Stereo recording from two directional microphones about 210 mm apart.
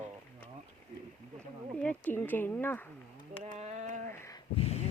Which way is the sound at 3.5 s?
35° right (ahead or behind).